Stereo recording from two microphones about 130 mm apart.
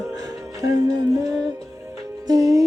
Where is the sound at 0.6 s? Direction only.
30° right (ahead or behind).